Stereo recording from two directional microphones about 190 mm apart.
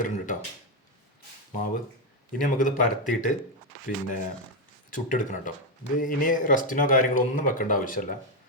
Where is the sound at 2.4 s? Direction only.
45° left (ahead or behind).